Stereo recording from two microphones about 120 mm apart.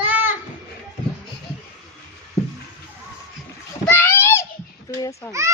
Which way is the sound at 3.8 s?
15° left (ahead or behind).